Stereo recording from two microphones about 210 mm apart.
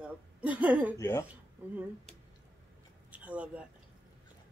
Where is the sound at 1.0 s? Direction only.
15° left (ahead or behind).